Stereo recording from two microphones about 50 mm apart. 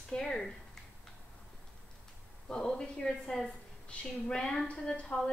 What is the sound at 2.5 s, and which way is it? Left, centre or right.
A woman's voice, centre.